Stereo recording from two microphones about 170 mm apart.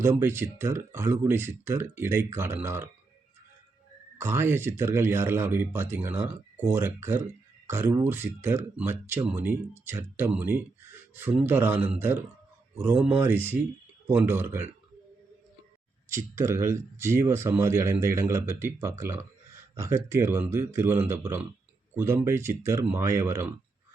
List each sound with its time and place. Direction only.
0.0 s speech: 15° right (ahead or behind)
4.2 s speech: 15° right (ahead or behind)
16.0 s speech: 15° right (ahead or behind)